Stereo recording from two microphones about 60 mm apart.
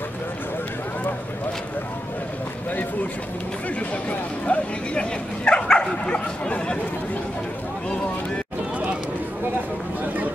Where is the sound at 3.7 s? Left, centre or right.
Left.